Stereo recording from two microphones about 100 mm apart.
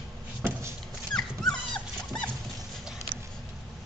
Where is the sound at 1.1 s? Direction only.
5° left (ahead or behind).